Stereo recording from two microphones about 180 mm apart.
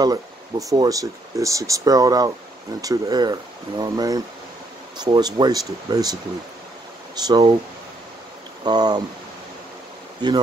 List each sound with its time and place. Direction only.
0.0 s speech: 20° right (ahead or behind)
7.2 s speech: 20° right (ahead or behind)
8.6 s speech: 20° right (ahead or behind)